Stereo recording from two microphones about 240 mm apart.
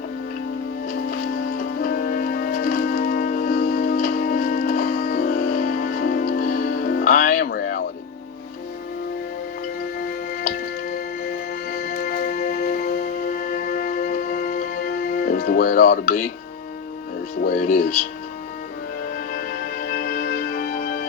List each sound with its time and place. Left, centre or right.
1.4 s music: left
10.4 s music: left
17.4 s speech: left
19.3 s music: left